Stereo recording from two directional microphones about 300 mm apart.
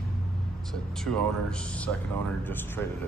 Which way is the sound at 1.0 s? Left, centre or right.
Centre.